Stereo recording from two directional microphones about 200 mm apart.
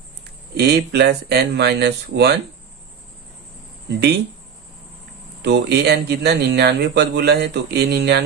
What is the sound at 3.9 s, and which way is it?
Speech, 55° right (ahead or behind).